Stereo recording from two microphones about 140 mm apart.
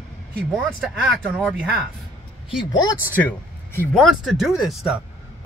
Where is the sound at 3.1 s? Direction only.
10° left (ahead or behind).